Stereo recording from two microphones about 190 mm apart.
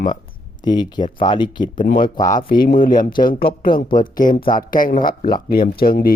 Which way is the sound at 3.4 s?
30° left (ahead or behind).